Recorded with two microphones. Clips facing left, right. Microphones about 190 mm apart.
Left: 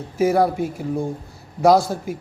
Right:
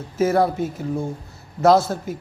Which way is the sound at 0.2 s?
10° left (ahead or behind).